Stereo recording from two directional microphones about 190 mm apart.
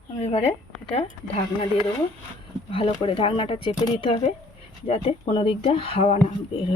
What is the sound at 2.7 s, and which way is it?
Speech, 30° left (ahead or behind).